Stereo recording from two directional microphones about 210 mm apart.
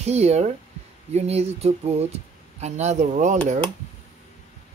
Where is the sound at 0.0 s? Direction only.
30° right (ahead or behind).